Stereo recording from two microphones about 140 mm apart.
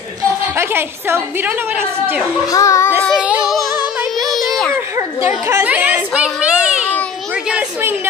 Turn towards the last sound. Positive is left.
turn(degrees=-5)  # may be behind; listen again after turning